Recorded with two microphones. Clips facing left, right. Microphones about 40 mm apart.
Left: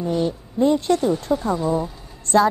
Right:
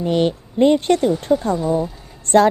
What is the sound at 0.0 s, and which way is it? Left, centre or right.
Speech, right.